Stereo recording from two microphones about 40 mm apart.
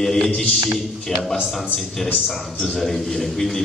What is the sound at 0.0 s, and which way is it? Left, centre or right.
A man's voice, centre.